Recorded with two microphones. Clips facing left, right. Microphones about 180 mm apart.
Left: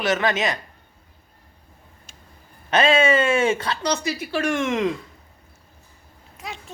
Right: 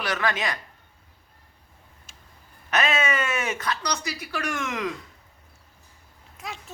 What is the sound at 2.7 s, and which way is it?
Speech, 30° left (ahead or behind).